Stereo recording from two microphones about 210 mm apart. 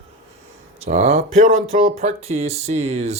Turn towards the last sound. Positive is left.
turn(degrees=-30)  # may be behind; listen again after turning